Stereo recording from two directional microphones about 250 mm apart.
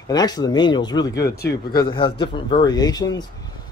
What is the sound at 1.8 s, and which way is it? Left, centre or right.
Speech, centre.